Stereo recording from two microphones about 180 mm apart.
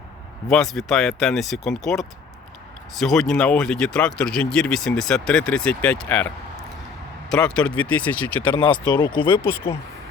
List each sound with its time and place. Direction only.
0.5 s speech: centre (ahead or behind)
8.8 s speech: 25° left (ahead or behind)